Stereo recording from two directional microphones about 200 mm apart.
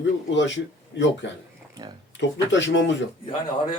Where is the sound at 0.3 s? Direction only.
65° left (ahead or behind).